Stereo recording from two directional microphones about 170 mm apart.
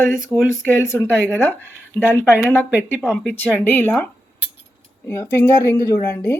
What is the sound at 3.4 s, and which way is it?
Speech, 10° left (ahead or behind).